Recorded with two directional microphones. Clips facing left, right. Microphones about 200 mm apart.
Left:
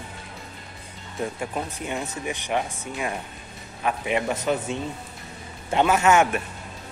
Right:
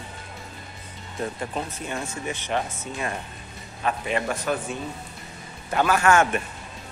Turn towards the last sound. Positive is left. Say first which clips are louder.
# left 1 dB
turn(degrees=20)  # may be behind; listen again after turning